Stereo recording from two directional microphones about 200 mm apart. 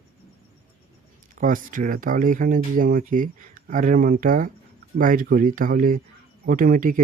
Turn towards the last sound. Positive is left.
turn(degrees=-45)  # may be behind; listen again after turning